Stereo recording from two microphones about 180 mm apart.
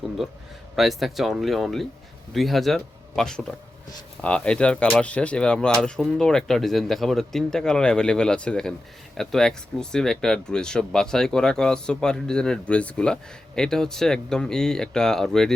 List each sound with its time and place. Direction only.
0.8 s speech: centre (ahead or behind)